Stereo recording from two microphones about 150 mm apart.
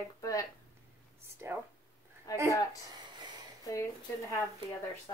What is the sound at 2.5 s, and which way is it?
Speech, 25° left (ahead or behind).